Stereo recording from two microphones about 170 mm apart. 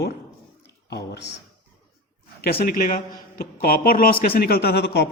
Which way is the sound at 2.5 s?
60° left (ahead or behind).